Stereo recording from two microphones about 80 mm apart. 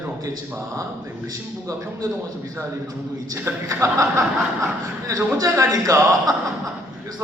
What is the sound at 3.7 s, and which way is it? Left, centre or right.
Speech, right.